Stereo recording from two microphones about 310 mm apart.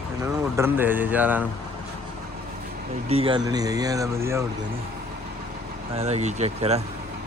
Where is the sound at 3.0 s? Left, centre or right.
Centre.